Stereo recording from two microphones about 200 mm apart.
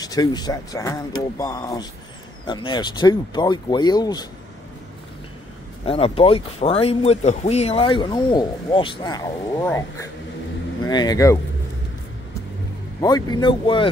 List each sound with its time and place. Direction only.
0.0 s speech: 20° left (ahead or behind)
5.9 s speech: 30° left (ahead or behind)
13.0 s speech: 20° left (ahead or behind)